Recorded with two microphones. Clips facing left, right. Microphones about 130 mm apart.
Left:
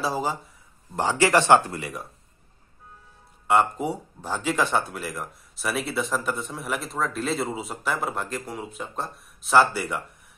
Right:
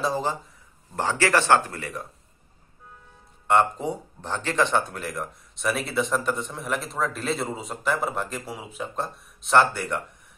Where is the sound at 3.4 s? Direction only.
5° left (ahead or behind).